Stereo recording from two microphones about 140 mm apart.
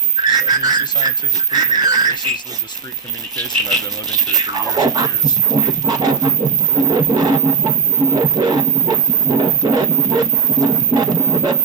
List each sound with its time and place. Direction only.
0.2 s speech: 30° right (ahead or behind)
3.3 s speech: 30° right (ahead or behind)
8.1 s a sound: 25° right (ahead or behind)